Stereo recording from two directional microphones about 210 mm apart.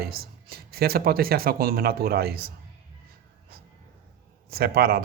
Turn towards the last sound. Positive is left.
turn(degrees=-45)  # may be behind; listen again after turning